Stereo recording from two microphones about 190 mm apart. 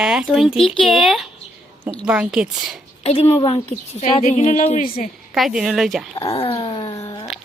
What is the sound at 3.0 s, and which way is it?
A woman's voice, 30° left (ahead or behind).